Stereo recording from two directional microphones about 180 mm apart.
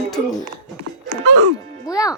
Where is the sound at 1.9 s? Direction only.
20° left (ahead or behind).